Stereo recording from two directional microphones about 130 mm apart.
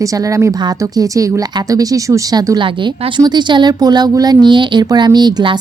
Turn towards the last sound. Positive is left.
turn(degrees=-35)  # may be behind; listen again after turning